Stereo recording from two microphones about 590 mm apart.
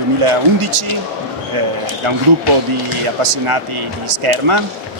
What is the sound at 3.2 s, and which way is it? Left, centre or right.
Speech, right.